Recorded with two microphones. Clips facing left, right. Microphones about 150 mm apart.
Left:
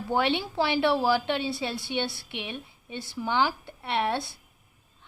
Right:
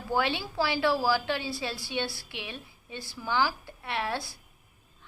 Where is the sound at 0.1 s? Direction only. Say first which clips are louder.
Left 3 dB; 20° left (ahead or behind).